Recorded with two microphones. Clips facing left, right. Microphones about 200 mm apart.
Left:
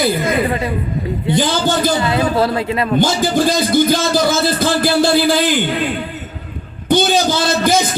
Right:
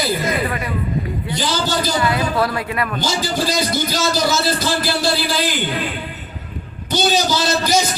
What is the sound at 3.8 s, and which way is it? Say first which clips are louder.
A man's voice: left 5 dB; 55° left (ahead or behind).